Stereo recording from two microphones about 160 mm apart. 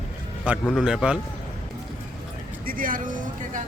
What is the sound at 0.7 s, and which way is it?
Speech, 5° right (ahead or behind).